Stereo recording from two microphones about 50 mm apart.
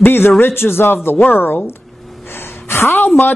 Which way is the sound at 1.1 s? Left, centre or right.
Left.